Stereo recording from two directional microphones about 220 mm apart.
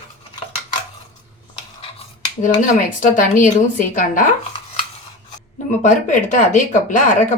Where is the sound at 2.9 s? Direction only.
35° left (ahead or behind).